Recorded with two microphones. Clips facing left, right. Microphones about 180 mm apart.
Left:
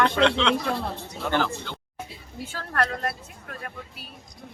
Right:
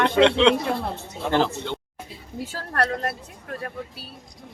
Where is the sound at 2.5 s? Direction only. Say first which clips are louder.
Right 2 dB; 40° right (ahead or behind).